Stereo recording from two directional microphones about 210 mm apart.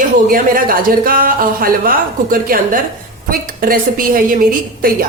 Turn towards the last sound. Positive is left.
turn(degrees=-45)  # may be behind; listen again after turning